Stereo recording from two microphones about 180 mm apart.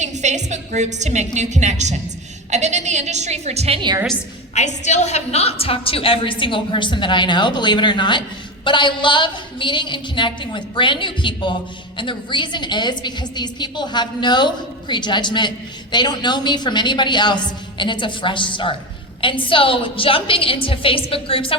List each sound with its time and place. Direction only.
0.0 s a woman's voice: 40° right (ahead or behind); by 4.0 s 25° right (ahead or behind)
4.5 s a woman's voice: 40° left (ahead or behind)